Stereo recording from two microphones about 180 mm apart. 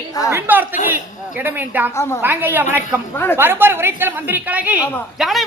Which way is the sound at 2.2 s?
10° right (ahead or behind).